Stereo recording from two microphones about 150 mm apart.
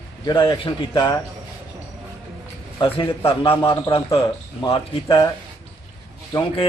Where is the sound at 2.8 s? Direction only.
35° left (ahead or behind).